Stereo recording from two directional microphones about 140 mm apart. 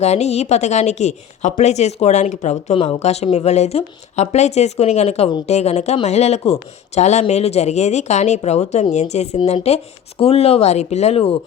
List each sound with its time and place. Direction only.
0.0 s a woman's voice: 50° left (ahead or behind)